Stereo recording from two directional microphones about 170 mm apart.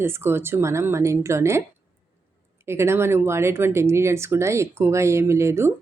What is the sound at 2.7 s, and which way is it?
Speech, 15° right (ahead or behind).